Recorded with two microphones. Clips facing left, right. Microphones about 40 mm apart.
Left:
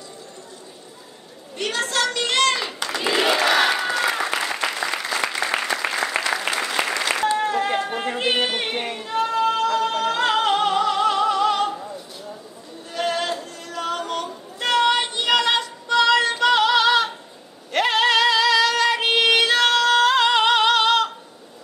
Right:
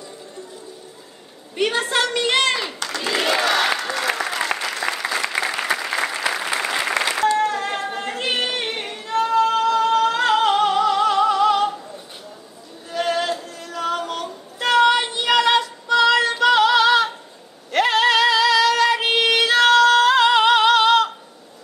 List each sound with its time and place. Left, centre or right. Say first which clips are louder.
1.6 s a woman's voice: right 3 dB; centre
2.8 s a sound: left 1 dB; centre
3.4 s applause: left 1 dB; centre
5.0 s applause: right 1 dB; centre
7.2 s music: right 1 dB; centre
12.9 s music: right 2 dB; centre
17.6 s female singing: right 2 dB; centre